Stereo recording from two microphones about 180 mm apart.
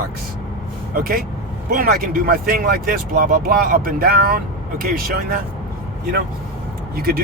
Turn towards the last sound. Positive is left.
turn(degrees=-55)  # may be behind; listen again after turning